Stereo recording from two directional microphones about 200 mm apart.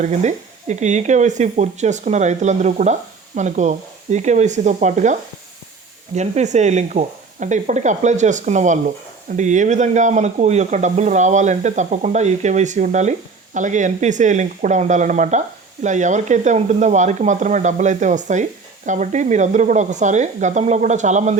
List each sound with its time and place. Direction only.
0.0 s speech: 35° right (ahead or behind)
6.1 s speech: 35° right (ahead or behind)